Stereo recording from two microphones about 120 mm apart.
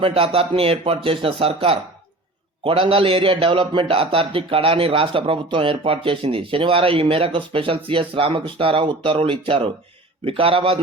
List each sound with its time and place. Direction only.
0.0 s a man's voice: 50° right (ahead or behind)